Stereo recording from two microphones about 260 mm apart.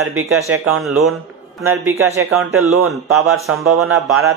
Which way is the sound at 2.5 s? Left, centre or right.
Right.